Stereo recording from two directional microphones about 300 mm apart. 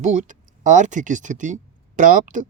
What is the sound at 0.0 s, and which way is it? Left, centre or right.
Speech, right.